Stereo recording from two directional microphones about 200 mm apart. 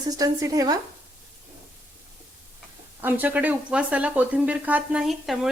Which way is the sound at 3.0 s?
10° right (ahead or behind).